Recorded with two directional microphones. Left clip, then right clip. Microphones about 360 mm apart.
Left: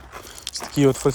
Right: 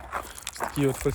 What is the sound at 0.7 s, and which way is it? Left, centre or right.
Speech, centre.